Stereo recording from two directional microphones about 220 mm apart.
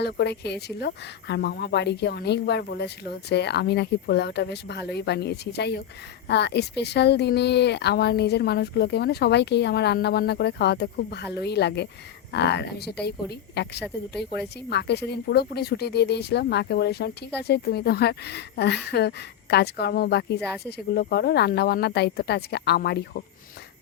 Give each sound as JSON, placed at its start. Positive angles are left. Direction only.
{"t": 0.0, "sound": "speech", "side_deg": 50}